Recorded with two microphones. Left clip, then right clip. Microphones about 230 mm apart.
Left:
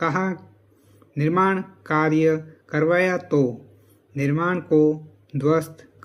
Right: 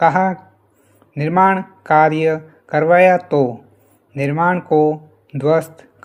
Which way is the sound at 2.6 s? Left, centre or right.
Right.